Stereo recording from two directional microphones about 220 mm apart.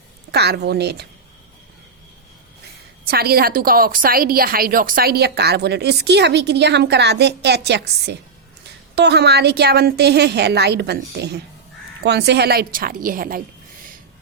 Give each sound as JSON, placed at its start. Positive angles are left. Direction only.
{"t": 0.3, "sound": "a woman's voice", "side_deg": -50}
{"t": 3.1, "sound": "a woman's voice", "side_deg": -45}